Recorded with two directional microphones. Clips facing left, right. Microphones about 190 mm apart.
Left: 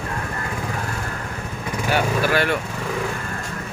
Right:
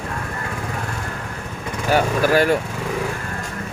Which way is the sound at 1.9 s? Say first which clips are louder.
Right 4 dB; 40° right (ahead or behind).